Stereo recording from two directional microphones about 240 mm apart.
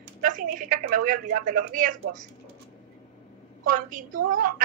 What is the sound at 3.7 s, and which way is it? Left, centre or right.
Speech, right.